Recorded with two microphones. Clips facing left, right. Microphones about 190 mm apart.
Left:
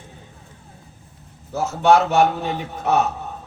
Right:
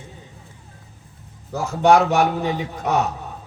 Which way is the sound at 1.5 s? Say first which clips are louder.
Right 1 dB; 15° right (ahead or behind).